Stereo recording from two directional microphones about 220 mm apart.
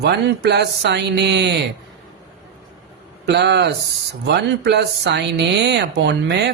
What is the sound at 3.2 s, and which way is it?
Speech, 50° right (ahead or behind).